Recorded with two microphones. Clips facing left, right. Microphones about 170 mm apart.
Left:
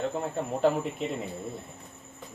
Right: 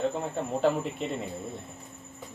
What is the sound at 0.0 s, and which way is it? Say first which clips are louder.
Speech: right 1 dB; centre (ahead or behind).